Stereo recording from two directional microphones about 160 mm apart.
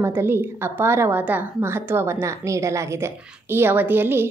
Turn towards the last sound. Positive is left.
turn(degrees=-15)  # may be behind; listen again after turning